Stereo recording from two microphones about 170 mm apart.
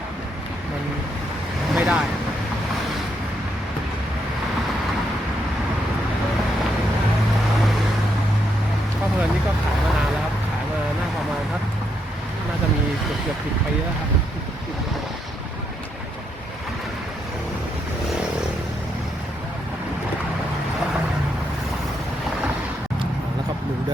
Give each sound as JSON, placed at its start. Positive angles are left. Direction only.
{"t": 1.7, "sound": "waves", "side_deg": -5}